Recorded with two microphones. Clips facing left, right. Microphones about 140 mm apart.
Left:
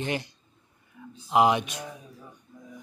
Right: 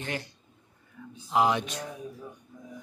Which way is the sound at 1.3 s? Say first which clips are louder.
Left 3 dB; 15° left (ahead or behind).